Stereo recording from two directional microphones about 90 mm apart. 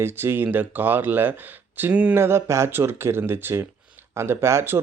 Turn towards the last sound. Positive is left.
turn(degrees=-30)  # may be behind; listen again after turning